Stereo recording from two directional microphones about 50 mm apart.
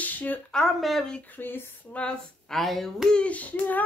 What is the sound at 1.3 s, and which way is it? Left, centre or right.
Speech, left.